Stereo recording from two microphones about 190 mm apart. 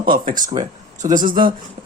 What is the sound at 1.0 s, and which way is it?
Speech, 45° right (ahead or behind).